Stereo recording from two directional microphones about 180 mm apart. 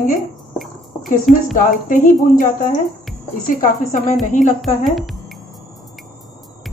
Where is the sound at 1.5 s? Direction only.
50° left (ahead or behind).